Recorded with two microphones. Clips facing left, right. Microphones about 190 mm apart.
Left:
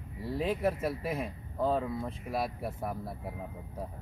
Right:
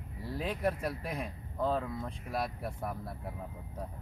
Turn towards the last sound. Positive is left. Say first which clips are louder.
# left 2 dB
turn(degrees=0)  # may be behind; listen again after turning